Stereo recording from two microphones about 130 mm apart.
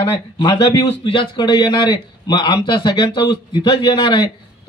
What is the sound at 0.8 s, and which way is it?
Speech, 45° left (ahead or behind).